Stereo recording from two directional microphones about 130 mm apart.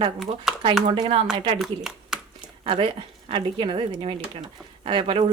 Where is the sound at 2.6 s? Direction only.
40° right (ahead or behind).